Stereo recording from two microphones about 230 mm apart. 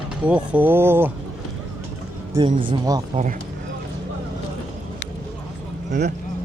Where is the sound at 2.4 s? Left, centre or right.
Right.